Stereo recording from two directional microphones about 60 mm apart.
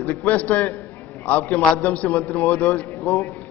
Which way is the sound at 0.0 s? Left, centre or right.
Left.